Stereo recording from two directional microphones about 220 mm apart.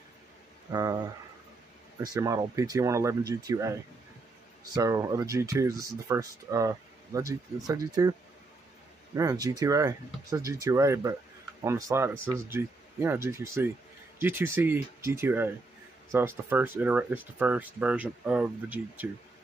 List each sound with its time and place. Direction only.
0.7 s speech: 15° right (ahead or behind)
4.7 s speech: 15° right (ahead or behind)